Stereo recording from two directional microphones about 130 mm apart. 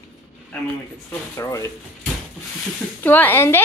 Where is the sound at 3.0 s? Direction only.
15° left (ahead or behind).